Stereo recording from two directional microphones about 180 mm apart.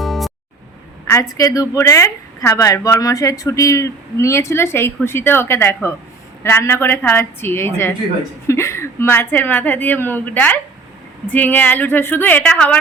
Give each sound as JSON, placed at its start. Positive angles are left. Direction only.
{"t": 0.0, "sound": "music", "side_deg": 0}
{"t": 1.0, "sound": "a woman's voice", "side_deg": 15}